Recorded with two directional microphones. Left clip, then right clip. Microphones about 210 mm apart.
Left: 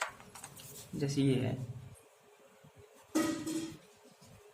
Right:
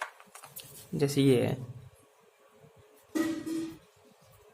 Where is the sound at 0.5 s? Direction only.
50° right (ahead or behind).